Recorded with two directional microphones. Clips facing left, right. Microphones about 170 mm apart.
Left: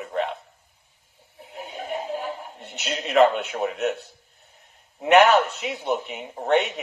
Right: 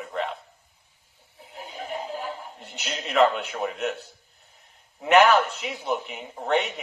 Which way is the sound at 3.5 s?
10° left (ahead or behind).